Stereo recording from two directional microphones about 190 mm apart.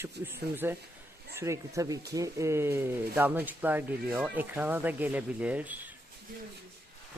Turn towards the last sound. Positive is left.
turn(degrees=-10)  # may be behind; listen again after turning